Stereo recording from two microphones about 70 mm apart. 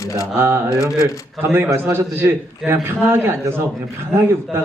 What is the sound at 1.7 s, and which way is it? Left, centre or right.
A man's voice, right.